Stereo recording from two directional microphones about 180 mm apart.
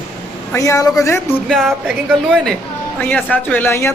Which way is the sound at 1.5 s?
Centre (ahead or behind).